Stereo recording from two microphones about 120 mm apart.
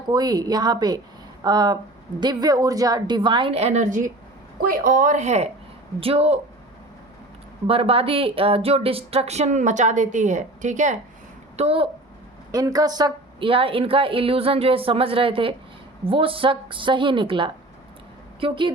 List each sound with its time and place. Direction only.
0.1 s a woman's voice: 35° right (ahead or behind)
3.5 s a woman's voice: 70° right (ahead or behind); by 4.0 s 85° right
5.0 s a woman's voice: 80° right
6.0 s speech: 55° right (ahead or behind)
7.7 s speech: 55° right (ahead or behind); by 10.9 s 90° right
11.5 s speech: 55° right (ahead or behind)
12.5 s a woman's voice: 30° right (ahead or behind)
13.4 s a woman's voice: 50° right (ahead or behind)